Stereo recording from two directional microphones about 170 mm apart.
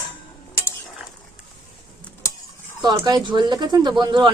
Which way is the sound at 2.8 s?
25° right (ahead or behind).